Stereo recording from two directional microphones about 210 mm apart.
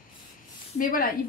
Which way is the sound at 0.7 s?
40° left (ahead or behind).